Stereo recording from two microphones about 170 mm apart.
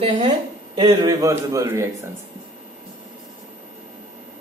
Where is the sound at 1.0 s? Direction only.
20° right (ahead or behind).